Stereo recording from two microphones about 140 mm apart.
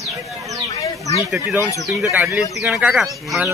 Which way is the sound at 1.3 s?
15° right (ahead or behind).